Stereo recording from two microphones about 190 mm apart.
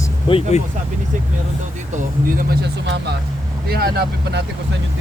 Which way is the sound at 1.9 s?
45° right (ahead or behind).